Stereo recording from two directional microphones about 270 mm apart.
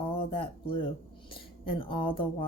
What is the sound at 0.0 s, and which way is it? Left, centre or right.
Speech, centre.